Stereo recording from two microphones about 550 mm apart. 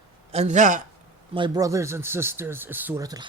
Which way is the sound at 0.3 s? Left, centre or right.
Centre.